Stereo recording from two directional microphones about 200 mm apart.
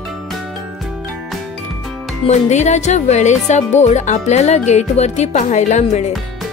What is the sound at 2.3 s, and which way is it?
Speech, 35° left (ahead or behind).